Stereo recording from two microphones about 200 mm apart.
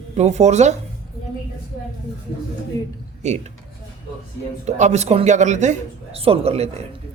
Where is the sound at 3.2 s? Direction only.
35° right (ahead or behind).